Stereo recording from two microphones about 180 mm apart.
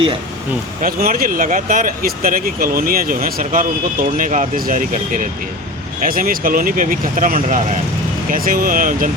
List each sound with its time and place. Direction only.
0.8 s speech: 55° right (ahead or behind)